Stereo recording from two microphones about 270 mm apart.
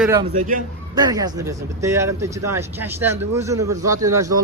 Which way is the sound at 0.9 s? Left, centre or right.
Centre.